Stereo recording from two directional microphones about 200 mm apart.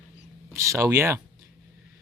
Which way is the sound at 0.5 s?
15° right (ahead or behind).